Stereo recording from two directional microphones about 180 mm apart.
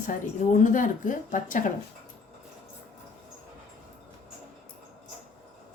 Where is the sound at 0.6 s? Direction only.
45° left (ahead or behind).